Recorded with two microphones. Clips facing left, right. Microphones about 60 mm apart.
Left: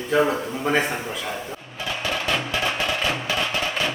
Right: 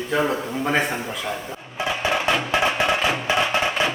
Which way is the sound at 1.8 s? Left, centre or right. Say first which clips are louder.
Right 4 dB; right.